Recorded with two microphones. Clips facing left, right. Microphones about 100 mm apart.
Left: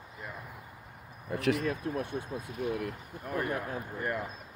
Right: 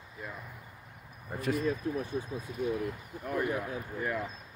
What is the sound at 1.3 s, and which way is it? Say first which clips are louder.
Speech: left 1 dB; 80° left.